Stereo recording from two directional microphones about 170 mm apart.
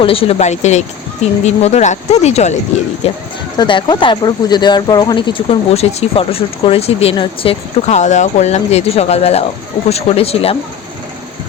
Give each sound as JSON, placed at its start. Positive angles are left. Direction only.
{"t": 0.0, "sound": "speech", "side_deg": 35}
{"t": 3.6, "sound": "speech", "side_deg": 25}